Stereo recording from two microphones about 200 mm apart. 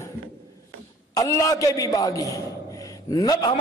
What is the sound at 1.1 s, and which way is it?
A man's voice, 15° left (ahead or behind).